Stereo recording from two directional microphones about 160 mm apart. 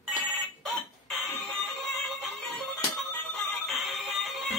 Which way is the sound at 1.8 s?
Centre (ahead or behind).